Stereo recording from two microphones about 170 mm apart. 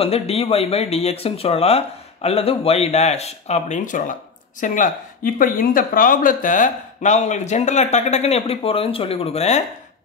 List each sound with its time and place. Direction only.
0.0 s speech: 35° left (ahead or behind)